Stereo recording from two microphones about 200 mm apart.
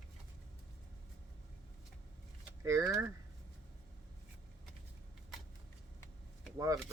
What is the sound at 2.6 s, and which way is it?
Speech, 15° right (ahead or behind).